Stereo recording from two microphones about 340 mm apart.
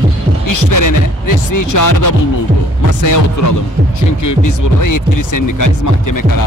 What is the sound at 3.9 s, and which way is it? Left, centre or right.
Speech, left.